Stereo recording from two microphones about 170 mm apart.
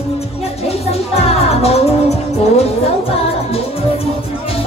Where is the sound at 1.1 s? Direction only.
35° left (ahead or behind).